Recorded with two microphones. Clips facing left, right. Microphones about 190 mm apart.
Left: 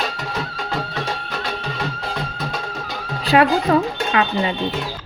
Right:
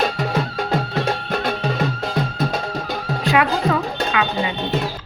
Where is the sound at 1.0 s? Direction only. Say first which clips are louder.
Right 5 dB; 55° right (ahead or behind).